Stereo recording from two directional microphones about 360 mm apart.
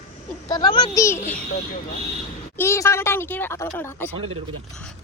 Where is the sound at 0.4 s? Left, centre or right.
Centre.